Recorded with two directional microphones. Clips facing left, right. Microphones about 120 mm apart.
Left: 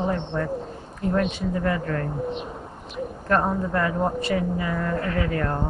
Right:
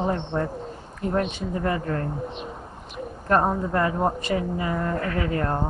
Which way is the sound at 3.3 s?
25° right (ahead or behind).